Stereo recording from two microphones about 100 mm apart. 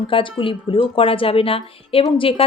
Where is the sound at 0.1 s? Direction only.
60° left (ahead or behind).